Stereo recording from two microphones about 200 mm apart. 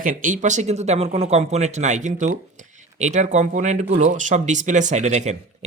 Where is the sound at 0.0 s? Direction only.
40° right (ahead or behind).